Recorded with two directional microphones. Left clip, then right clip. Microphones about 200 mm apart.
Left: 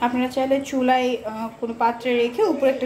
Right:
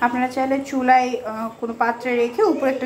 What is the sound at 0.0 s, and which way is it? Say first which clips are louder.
A woman's voice: right 2 dB; centre (ahead or behind).